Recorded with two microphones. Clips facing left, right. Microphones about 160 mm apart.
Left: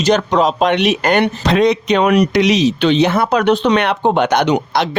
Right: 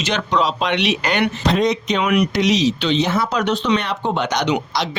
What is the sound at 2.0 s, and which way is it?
Speech, 40° left (ahead or behind).